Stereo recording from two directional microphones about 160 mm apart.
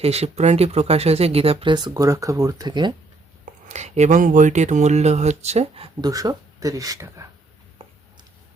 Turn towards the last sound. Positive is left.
turn(degrees=-35)  # may be behind; listen again after turning